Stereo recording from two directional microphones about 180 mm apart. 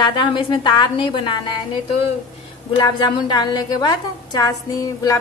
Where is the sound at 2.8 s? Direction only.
25° left (ahead or behind).